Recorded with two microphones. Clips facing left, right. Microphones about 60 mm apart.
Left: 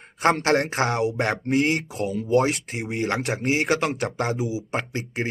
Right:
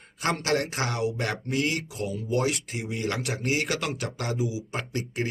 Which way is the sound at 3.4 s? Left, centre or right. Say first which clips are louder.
Left 5 dB; left.